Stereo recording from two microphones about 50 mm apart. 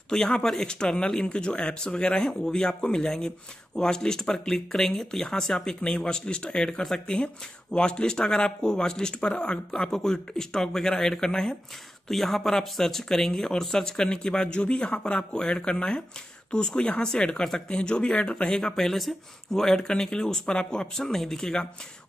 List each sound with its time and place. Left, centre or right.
0.1 s speech: centre